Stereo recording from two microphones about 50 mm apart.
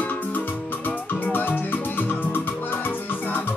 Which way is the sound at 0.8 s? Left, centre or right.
Left.